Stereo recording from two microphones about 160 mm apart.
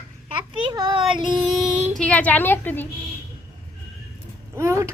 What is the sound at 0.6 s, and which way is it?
Child singing, 30° right (ahead or behind).